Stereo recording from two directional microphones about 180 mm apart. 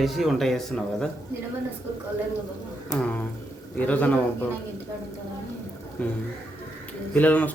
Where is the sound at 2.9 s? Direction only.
15° left (ahead or behind).